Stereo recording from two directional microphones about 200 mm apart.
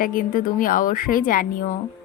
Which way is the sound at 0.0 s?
45° left (ahead or behind).